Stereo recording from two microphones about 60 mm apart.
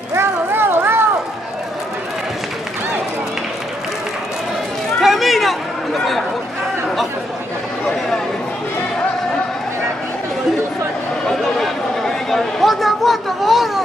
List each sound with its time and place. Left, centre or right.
0.1 s a sound: right
5.0 s chatter: centre
11.2 s chatter: centre